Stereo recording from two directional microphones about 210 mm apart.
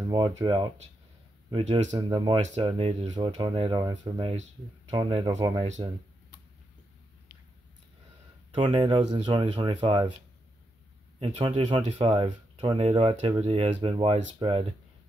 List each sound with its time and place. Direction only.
0.1 s speech: 20° right (ahead or behind)
8.5 s speech: 25° right (ahead or behind)
11.1 s speech: 25° right (ahead or behind)